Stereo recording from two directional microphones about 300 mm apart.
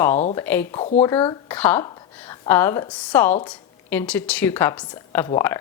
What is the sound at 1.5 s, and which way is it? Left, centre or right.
Speech, centre.